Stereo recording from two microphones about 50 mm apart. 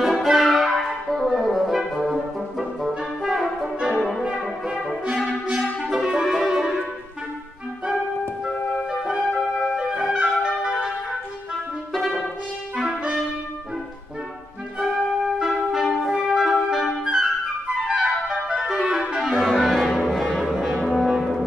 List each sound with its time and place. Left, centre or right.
0.0 s music: centre
3.3 s brass instrument: centre
4.2 s music: centre
5.5 s music: centre
9.0 s music: centre
11.9 s brass instrument: centre
15.4 s music: centre
17.0 s flute: centre
17.8 s music: centre
18.6 s clarinet: centre
20.2 s brass instrument: centre